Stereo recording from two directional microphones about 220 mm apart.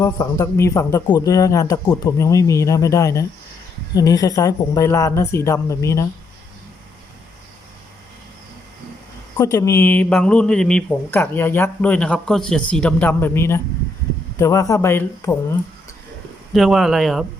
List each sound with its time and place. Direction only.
0.0 s speech: 15° left (ahead or behind)
9.4 s speech: 15° left (ahead or behind)
16.5 s speech: centre (ahead or behind)